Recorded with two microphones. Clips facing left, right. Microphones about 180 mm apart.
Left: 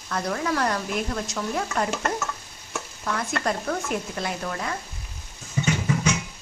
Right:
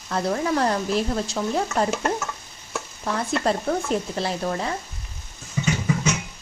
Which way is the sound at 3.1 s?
30° right (ahead or behind).